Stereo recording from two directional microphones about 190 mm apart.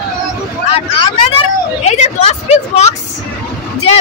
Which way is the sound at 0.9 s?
30° left (ahead or behind).